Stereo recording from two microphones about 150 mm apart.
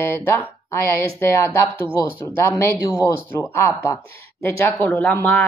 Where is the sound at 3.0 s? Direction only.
15° left (ahead or behind).